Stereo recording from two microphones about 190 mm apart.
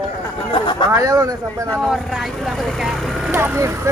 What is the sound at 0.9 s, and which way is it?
Speech, 15° right (ahead or behind).